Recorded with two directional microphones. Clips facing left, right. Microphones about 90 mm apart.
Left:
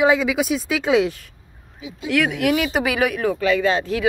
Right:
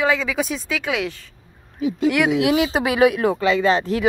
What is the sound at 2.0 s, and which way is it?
Speech, 15° right (ahead or behind).